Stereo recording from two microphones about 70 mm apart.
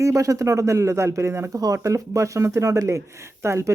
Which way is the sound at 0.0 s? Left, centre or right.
Right.